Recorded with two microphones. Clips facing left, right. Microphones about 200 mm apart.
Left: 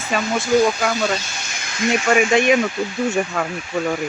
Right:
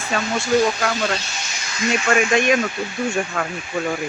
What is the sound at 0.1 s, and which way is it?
Speech, 5° left (ahead or behind).